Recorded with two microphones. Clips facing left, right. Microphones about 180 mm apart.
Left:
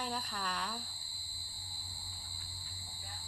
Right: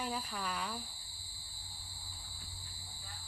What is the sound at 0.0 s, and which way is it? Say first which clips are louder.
Speech: right 1 dB; 5° right (ahead or behind).